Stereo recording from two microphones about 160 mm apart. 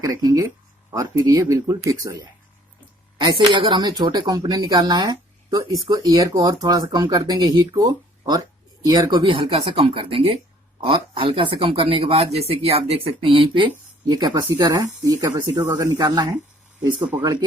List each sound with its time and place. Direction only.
0.0 s speech: 20° right (ahead or behind)
17.0 s speech: 10° right (ahead or behind)